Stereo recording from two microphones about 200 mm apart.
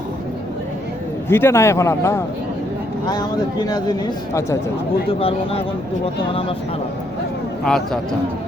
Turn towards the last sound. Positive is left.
turn(degrees=5)  # may be behind; listen again after turning